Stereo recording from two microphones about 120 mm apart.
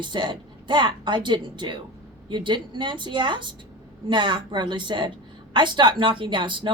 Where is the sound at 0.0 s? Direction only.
40° right (ahead or behind).